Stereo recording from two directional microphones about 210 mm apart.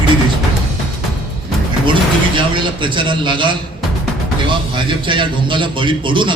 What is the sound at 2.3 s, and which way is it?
A man's voice, 25° right (ahead or behind).